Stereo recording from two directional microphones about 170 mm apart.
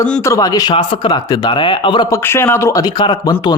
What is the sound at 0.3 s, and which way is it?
A man's voice, 20° left (ahead or behind).